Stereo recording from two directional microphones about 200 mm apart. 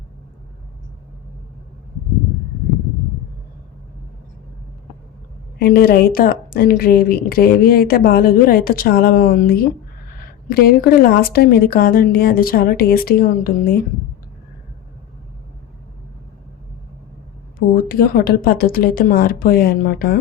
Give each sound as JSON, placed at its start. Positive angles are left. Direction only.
{"t": 5.5, "sound": "speech", "side_deg": 50}
{"t": 17.7, "sound": "speech", "side_deg": 50}